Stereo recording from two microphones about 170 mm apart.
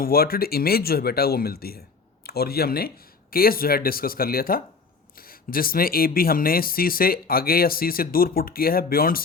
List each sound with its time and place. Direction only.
0.0 s speech: 60° left (ahead or behind)